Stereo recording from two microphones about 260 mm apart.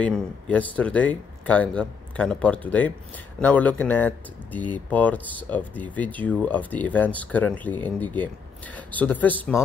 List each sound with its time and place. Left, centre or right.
0.0 s speech: centre